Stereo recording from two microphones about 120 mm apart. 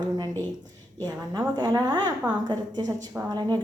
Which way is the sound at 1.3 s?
35° right (ahead or behind).